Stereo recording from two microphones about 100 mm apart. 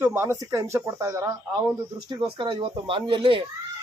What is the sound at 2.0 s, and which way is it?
Speech, 50° right (ahead or behind).